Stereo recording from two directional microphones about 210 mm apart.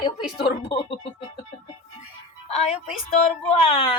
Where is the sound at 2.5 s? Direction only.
30° left (ahead or behind).